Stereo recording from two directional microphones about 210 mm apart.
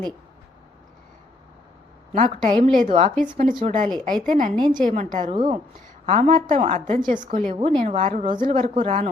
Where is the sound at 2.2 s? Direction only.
25° right (ahead or behind).